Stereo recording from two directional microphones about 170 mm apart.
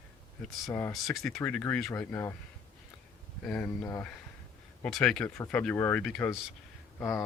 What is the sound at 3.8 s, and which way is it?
Speech, 15° left (ahead or behind).